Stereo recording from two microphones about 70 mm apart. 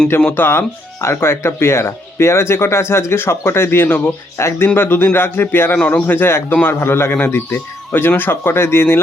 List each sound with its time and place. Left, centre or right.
0.3 s a man's voice: left
3.8 s speech: left
4.4 s a man's voice: left
4.7 s a man's voice: left